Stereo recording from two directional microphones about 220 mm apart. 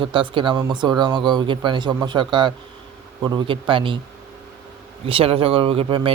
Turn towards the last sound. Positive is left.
turn(degrees=-25)  # may be behind; listen again after turning